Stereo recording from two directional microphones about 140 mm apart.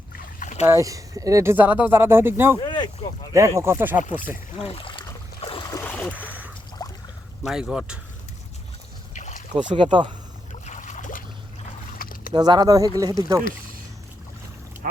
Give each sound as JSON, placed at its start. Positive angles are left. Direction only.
{"t": 0.3, "sound": "boat", "side_deg": 55}
{"t": 0.7, "sound": "speech", "side_deg": -25}
{"t": 2.6, "sound": "boat", "side_deg": 35}
{"t": 3.3, "sound": "speech", "side_deg": -20}
{"t": 4.7, "sound": "a sound", "side_deg": 40}
{"t": 5.7, "sound": "a sound", "side_deg": 10}
{"t": 6.8, "sound": "boat", "side_deg": 30}
{"t": 7.4, "sound": "speech", "side_deg": -5}
{"t": 9.1, "sound": "boat", "side_deg": 60}
{"t": 9.6, "sound": "speech", "side_deg": -35}
{"t": 10.5, "sound": "boat", "side_deg": 60}
{"t": 11.9, "sound": "a sound", "side_deg": 90}
{"t": 12.3, "sound": "speech", "side_deg": -30}